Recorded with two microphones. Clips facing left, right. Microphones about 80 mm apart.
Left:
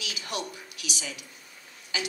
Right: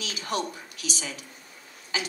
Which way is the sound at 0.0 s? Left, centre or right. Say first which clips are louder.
Right 4 dB; right.